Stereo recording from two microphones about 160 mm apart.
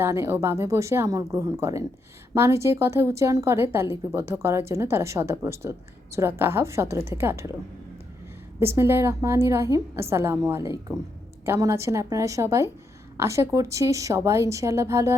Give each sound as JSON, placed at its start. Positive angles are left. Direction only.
{"t": 0.0, "sound": "a woman's voice", "side_deg": -15}
{"t": 8.5, "sound": "a woman's voice", "side_deg": -15}